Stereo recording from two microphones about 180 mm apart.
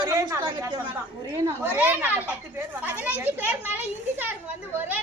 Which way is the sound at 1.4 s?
10° right (ahead or behind).